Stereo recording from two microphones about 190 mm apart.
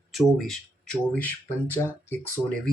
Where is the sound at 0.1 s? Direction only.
Centre (ahead or behind).